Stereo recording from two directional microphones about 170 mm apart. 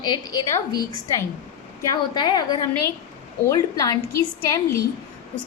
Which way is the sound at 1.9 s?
25° left (ahead or behind).